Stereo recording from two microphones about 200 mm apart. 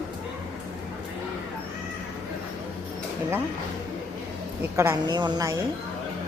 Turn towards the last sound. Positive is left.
turn(degrees=-20)  # may be behind; listen again after turning